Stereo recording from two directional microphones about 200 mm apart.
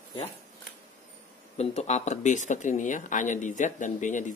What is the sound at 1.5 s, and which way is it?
Speech, 35° left (ahead or behind).